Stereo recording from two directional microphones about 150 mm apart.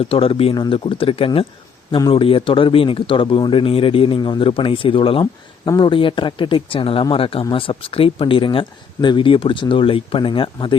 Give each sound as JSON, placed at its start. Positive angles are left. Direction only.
{"t": 0.0, "sound": "a man's voice", "side_deg": 40}